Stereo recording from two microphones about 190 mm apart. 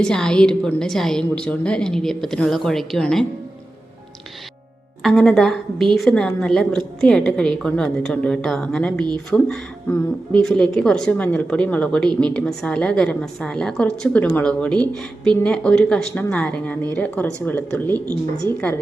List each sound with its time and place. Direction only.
0.0 s a woman's voice: 5° left (ahead or behind)
5.0 s a woman's voice: centre (ahead or behind)